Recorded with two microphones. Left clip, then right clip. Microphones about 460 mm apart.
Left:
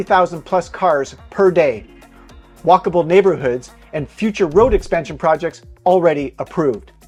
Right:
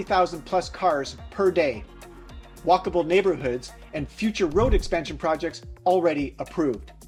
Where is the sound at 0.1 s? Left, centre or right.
Left.